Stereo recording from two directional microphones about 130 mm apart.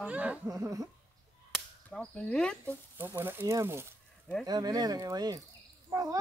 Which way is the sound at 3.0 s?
15° right (ahead or behind).